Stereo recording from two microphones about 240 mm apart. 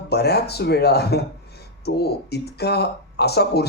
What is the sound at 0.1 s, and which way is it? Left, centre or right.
A man's voice, left.